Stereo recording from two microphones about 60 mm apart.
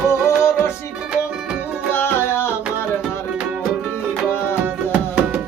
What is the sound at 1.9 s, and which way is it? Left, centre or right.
Music, left.